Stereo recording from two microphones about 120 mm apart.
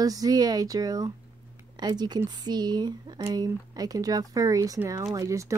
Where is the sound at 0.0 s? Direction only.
30° right (ahead or behind).